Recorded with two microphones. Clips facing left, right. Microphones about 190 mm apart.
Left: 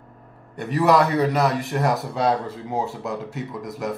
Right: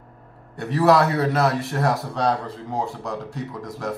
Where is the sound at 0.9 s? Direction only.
15° left (ahead or behind).